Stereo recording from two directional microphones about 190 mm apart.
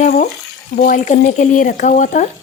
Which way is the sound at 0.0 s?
45° left (ahead or behind).